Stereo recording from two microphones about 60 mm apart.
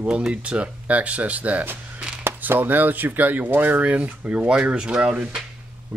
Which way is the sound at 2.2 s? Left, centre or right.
Right.